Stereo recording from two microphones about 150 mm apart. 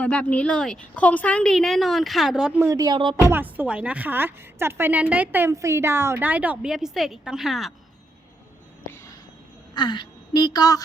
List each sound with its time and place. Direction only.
0.0 s a woman's voice: 10° left (ahead or behind)
2.6 s speech: 25° right (ahead or behind)
3.2 s speech: 15° right (ahead or behind)
8.9 s a sound: 20° left (ahead or behind)
9.7 s a woman's voice: 30° left (ahead or behind)